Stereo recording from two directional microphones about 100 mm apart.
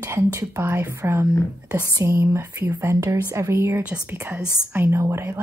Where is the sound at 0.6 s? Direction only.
25° right (ahead or behind).